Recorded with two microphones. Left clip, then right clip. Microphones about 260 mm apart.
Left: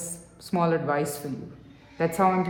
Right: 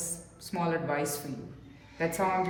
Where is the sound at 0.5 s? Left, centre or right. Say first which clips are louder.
Left 6 dB; centre.